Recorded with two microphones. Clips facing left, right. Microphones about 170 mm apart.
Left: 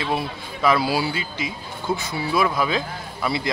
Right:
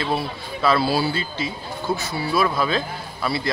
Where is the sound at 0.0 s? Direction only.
15° left (ahead or behind).